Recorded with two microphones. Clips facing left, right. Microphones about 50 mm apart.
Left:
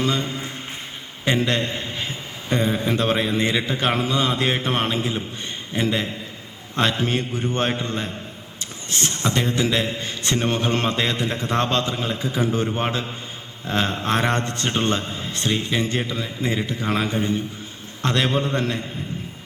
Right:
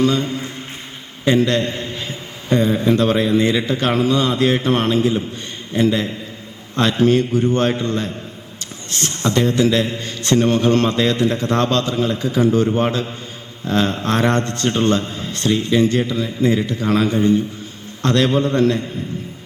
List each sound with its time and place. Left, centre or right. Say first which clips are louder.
0.0 s a man's voice: right 6 dB; left
1.2 s a sound: right 5 dB; left
2.8 s a man's voice: right 5 dB; left